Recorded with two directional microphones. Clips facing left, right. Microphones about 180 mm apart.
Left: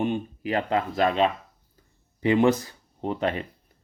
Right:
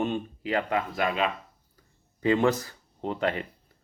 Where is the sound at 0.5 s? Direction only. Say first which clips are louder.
Left 2 dB; 30° left (ahead or behind).